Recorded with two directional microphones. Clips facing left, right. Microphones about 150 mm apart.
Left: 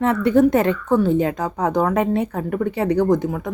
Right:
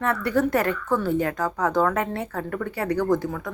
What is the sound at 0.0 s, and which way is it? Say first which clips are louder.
A woman's voice: left 7 dB; 20° left (ahead or behind).